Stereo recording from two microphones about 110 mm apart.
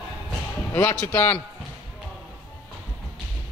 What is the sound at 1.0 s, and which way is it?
Speech, 20° left (ahead or behind).